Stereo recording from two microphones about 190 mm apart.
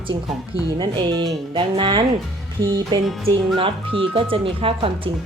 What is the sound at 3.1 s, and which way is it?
Speech, centre (ahead or behind).